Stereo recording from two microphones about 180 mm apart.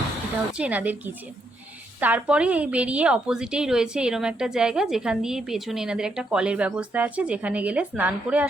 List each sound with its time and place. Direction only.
0.5 s a woman's voice: 10° right (ahead or behind)